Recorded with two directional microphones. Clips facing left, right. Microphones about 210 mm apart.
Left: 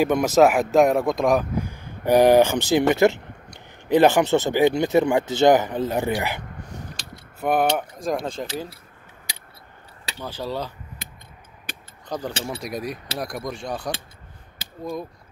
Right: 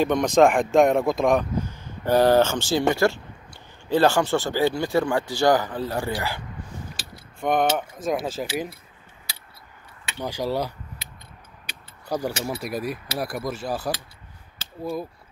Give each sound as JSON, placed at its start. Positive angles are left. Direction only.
{"t": 0.0, "sound": "speech", "side_deg": 5}
{"t": 1.6, "sound": "speech", "side_deg": 15}
{"t": 7.0, "sound": "keys jangling", "side_deg": -5}
{"t": 7.3, "sound": "mechanisms", "side_deg": 5}
{"t": 8.0, "sound": "speech", "side_deg": -5}
{"t": 10.1, "sound": "speech", "side_deg": -15}
{"t": 11.7, "sound": "keys jangling", "side_deg": 50}
{"t": 12.1, "sound": "speech", "side_deg": -10}